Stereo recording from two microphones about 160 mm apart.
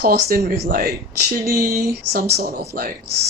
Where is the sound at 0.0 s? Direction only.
85° right.